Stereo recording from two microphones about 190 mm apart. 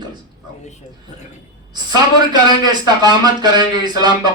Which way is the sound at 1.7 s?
20° right (ahead or behind).